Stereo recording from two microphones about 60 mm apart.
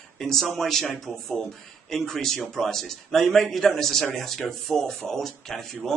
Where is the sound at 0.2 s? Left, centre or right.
Centre.